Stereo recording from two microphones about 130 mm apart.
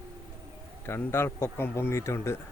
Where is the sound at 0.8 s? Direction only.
20° left (ahead or behind).